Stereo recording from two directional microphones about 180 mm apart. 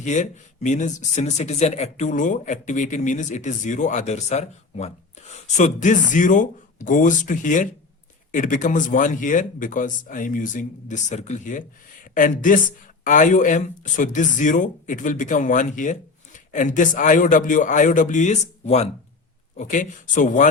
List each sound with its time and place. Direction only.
0.0 s speech: 40° left (ahead or behind)